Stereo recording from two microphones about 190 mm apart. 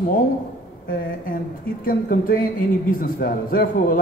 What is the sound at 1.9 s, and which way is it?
A man's voice, 45° left (ahead or behind).